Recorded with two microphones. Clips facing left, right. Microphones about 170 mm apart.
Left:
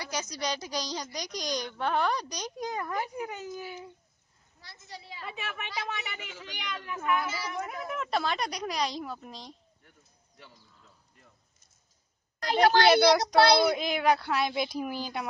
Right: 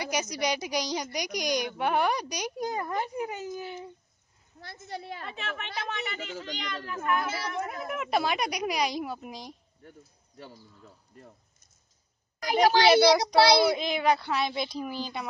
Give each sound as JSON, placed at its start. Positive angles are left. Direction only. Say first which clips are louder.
{"t": 0.0, "sound": "speech", "louder": "right 4 dB", "side_deg": -15}
{"t": 4.6, "sound": "a woman's voice", "louder": "right 8 dB", "side_deg": -55}
{"t": 5.2, "sound": "a child's voice", "louder": "right 1 dB", "side_deg": 10}
{"t": 7.4, "sound": "speech", "louder": "right 2 dB", "side_deg": 0}
{"t": 9.8, "sound": "speech", "louder": "right 14 dB", "side_deg": -40}
{"t": 12.4, "sound": "a woman's voice", "louder": "even", "side_deg": -10}